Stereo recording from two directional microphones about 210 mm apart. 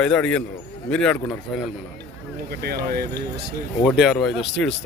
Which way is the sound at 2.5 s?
45° right (ahead or behind).